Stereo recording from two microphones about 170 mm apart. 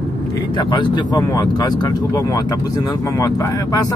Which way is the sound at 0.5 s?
30° left (ahead or behind).